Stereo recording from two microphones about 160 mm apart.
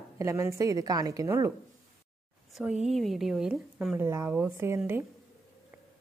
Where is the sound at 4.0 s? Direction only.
15° right (ahead or behind).